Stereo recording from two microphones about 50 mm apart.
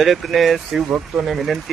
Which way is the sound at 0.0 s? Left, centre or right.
Centre.